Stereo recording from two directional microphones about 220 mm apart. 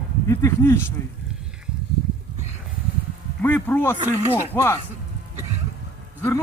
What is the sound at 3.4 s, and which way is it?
A man's voice, 10° left (ahead or behind).